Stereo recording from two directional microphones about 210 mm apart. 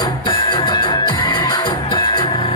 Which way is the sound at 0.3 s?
20° left (ahead or behind).